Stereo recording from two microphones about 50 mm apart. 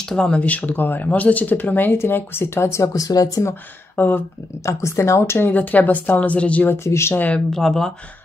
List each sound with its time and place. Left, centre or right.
0.1 s speech: centre
0.4 s speech: left
2.0 s speech: left
3.9 s speech: left
4.6 s speech: left
5.4 s speech: left
6.8 s speech: left
7.5 s speech: centre